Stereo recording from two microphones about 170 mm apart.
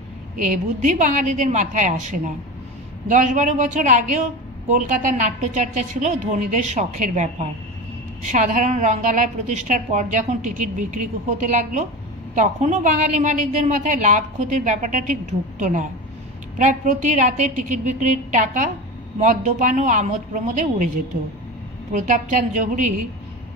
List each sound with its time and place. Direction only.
0.4 s speech: 45° right (ahead or behind)
21.9 s speech: 50° right (ahead or behind)